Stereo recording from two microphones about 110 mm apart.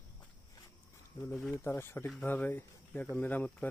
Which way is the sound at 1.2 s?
25° left (ahead or behind).